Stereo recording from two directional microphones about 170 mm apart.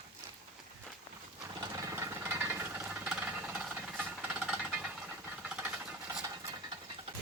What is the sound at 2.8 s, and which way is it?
Jackhammer, 5° right (ahead or behind).